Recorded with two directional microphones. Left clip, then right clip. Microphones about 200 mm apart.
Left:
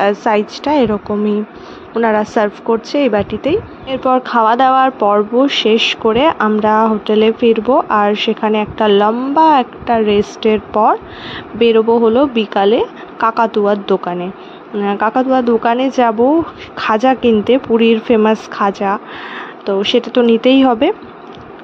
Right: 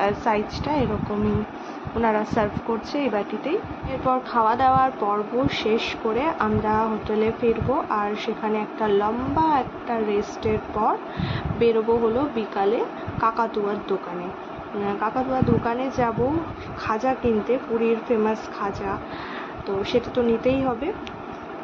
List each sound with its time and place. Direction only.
0.0 s speech: 35° left (ahead or behind)
2.0 s speech: 35° left (ahead or behind)